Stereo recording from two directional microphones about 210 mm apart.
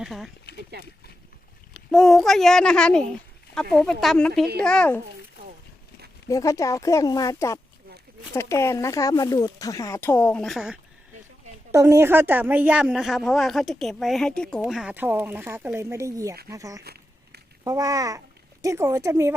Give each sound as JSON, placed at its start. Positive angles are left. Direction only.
{"t": 0.0, "sound": "a child's voice", "side_deg": 0}
{"t": 0.5, "sound": "a sound", "side_deg": 50}
{"t": 1.7, "sound": "a child's voice", "side_deg": 0}
{"t": 6.2, "sound": "speech", "side_deg": 15}
{"t": 11.7, "sound": "speech", "side_deg": -15}
{"t": 16.8, "sound": "a sound", "side_deg": -50}
{"t": 17.6, "sound": "speech", "side_deg": -15}